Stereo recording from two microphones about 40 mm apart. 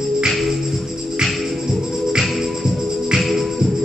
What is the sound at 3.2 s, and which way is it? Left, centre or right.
Music, centre.